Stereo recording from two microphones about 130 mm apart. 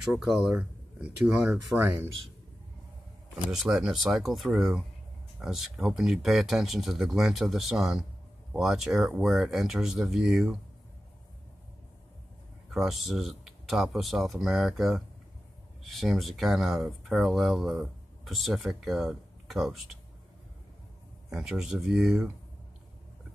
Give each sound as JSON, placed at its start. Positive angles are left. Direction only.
{"t": 0.0, "sound": "speech", "side_deg": 0}
{"t": 1.8, "sound": "speech", "side_deg": -15}
{"t": 3.4, "sound": "speech", "side_deg": -5}
{"t": 12.7, "sound": "speech", "side_deg": 0}
{"t": 21.3, "sound": "speech", "side_deg": -5}